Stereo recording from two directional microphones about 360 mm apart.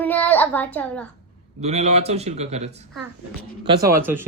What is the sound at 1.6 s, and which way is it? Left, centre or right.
A man's voice, centre.